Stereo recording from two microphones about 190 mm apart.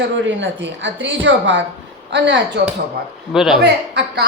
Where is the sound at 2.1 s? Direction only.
65° right (ahead or behind).